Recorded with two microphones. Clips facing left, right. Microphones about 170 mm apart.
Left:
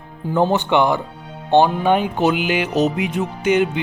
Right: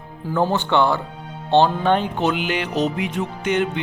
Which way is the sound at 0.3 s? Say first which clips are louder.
Left 2 dB; 20° left (ahead or behind).